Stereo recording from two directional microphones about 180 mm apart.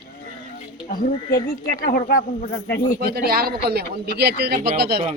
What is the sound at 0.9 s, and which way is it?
Speech, 55° left (ahead or behind).